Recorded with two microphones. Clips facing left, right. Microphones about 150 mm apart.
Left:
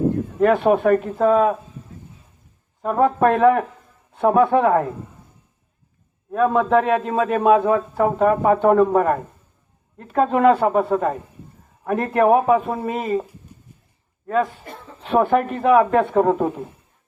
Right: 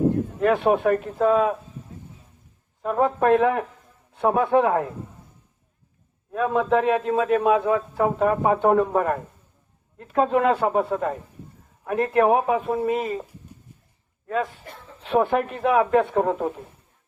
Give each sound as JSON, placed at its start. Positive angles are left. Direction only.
{"t": 0.3, "sound": "a man's voice", "side_deg": 55}
{"t": 2.8, "sound": "a man's voice", "side_deg": 50}
{"t": 6.3, "sound": "a man's voice", "side_deg": 50}
{"t": 15.0, "sound": "a man's voice", "side_deg": 50}